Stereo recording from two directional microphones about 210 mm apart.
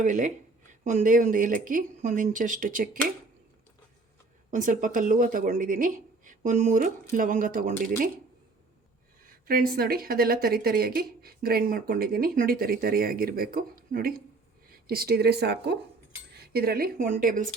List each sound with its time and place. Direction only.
0.0 s speech: 35° right (ahead or behind)
4.5 s speech: 40° right (ahead or behind)
9.5 s speech: 45° right (ahead or behind)